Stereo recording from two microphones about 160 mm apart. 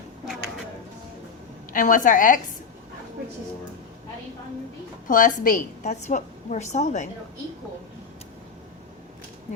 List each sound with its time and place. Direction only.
1.7 s a woman's voice: 55° left (ahead or behind)
5.0 s a woman's voice: 55° left (ahead or behind)